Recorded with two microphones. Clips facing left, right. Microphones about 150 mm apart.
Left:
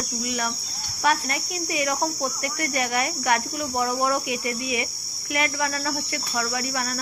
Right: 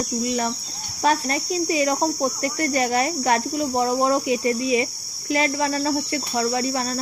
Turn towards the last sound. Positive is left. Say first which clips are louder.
# right 5 dB
turn(degrees=-25)  # may be behind; listen again after turning